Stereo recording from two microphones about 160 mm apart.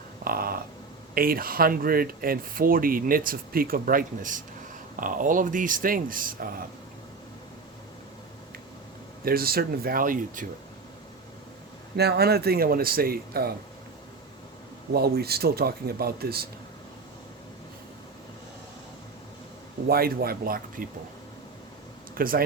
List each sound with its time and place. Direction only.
0.3 s a sound: 65° right (ahead or behind)
1.1 s speech: 65° right (ahead or behind)
9.2 s speech: 70° right (ahead or behind)
11.9 s speech: 85° right; by 13.5 s 70° right (ahead or behind)
14.9 s speech: 75° right (ahead or behind)
19.9 s speech: 70° right (ahead or behind)
22.1 s speech: 65° right (ahead or behind)